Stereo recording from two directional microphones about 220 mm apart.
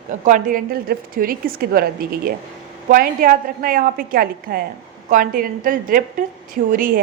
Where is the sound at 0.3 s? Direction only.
40° right (ahead or behind).